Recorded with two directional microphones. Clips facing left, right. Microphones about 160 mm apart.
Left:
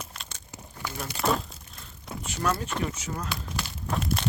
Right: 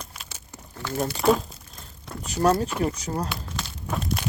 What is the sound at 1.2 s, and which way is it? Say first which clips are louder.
Speech: right 6 dB; centre (ahead or behind).